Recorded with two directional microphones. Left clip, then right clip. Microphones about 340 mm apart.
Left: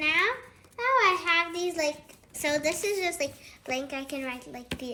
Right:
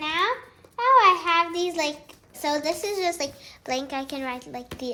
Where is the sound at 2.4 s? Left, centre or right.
Centre.